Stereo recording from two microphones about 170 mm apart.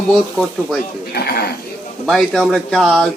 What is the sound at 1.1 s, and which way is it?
Speech, 65° left (ahead or behind).